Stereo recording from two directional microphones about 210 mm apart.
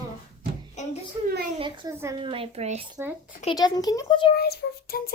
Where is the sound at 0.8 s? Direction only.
35° left (ahead or behind).